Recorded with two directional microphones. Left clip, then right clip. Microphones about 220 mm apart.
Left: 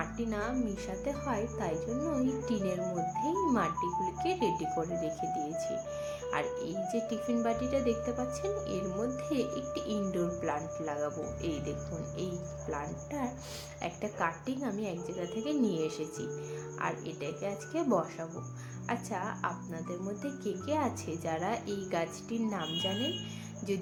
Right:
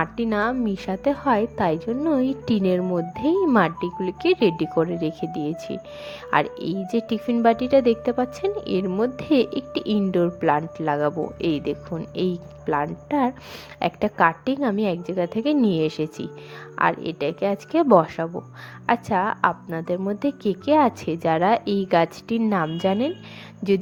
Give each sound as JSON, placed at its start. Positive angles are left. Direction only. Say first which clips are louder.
{"t": 0.0, "sound": "a woman's voice", "louder": "right 13 dB", "side_deg": -40}